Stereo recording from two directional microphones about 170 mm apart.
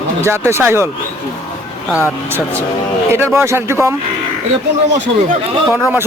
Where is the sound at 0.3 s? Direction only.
15° right (ahead or behind).